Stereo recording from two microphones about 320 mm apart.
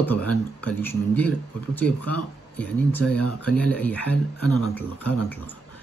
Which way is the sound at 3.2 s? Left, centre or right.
Left.